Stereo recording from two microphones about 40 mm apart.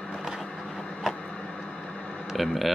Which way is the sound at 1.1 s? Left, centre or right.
Left.